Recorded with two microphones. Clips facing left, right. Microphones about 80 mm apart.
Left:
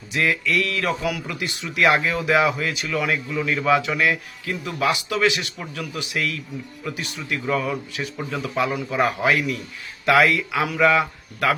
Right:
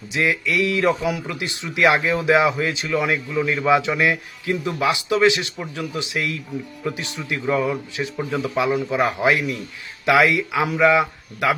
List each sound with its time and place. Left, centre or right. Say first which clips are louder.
0.1 s speech: even; centre